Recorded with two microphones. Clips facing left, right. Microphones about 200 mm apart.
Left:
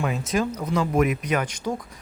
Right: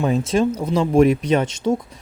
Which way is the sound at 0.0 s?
30° right (ahead or behind).